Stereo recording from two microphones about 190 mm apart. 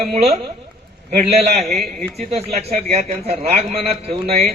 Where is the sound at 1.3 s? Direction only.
35° right (ahead or behind).